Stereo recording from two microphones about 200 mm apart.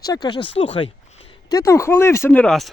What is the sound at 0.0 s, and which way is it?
Speech, 20° left (ahead or behind).